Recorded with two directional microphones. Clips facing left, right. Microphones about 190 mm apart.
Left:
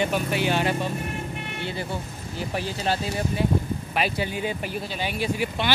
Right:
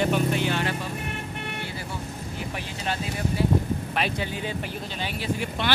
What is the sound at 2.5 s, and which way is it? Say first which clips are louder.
Speech: left 7 dB; 35° left (ahead or behind).